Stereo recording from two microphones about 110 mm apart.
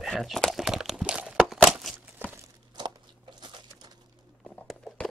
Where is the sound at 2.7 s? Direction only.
45° right (ahead or behind).